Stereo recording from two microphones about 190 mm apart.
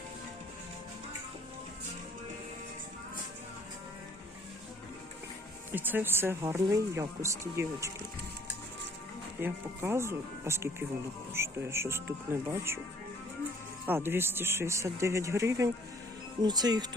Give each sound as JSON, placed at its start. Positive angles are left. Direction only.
{"t": 5.7, "sound": "speech", "side_deg": -10}
{"t": 9.4, "sound": "speech", "side_deg": -10}
{"t": 13.8, "sound": "speech", "side_deg": -10}